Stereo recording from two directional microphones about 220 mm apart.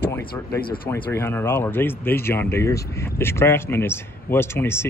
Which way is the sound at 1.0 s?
10° left (ahead or behind).